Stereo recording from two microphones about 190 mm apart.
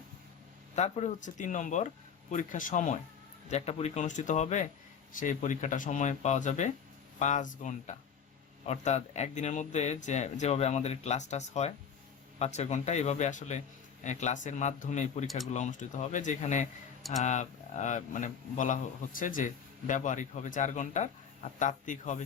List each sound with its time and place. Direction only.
0.8 s speech: 35° left (ahead or behind)